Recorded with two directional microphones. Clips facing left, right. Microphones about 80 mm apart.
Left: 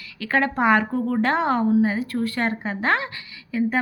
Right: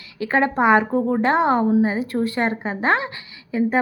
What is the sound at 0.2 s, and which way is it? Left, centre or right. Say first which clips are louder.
A woman's voice: right 3 dB; centre.